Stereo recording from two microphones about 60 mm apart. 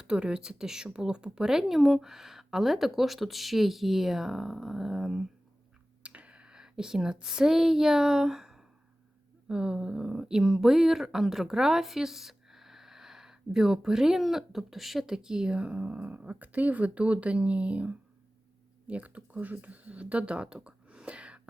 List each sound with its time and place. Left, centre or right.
0.0 s speech: centre
6.0 s speech: right
20.7 s whispering: centre